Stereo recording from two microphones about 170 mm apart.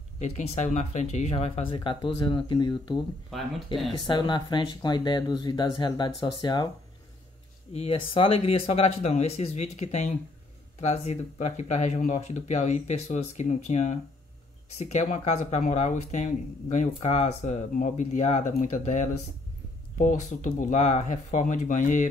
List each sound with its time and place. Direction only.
0.2 s speech: 40° left (ahead or behind)
3.3 s speech: centre (ahead or behind)
4.1 s speech: 25° left (ahead or behind)
7.7 s speech: 35° left (ahead or behind)